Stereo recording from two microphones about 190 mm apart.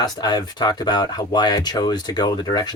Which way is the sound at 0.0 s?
20° left (ahead or behind).